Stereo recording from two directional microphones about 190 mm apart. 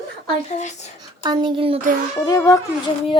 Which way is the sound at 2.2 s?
20° left (ahead or behind).